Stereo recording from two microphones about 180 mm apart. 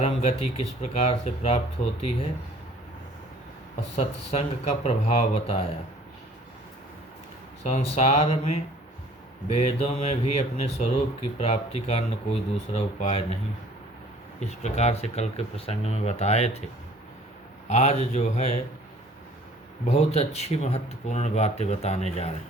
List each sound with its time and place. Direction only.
0.0 s speech: 35° left (ahead or behind)
3.9 s speech: 35° left (ahead or behind)
7.6 s speech: 40° left (ahead or behind)
14.4 s speech: 40° left (ahead or behind)
17.7 s speech: 40° left (ahead or behind)
19.8 s speech: 35° left (ahead or behind)